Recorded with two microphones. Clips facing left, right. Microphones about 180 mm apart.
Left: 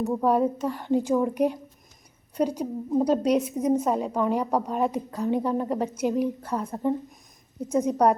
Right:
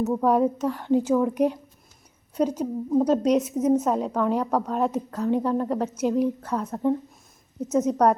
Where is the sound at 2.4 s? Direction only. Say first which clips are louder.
Right 2 dB; 10° left (ahead or behind).